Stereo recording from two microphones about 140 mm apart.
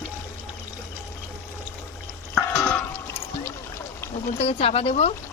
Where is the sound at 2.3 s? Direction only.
15° left (ahead or behind).